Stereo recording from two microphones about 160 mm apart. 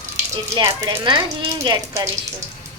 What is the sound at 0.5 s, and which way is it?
Speech, 25° right (ahead or behind).